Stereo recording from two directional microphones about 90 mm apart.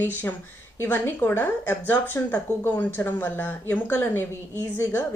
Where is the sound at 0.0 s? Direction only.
20° left (ahead or behind).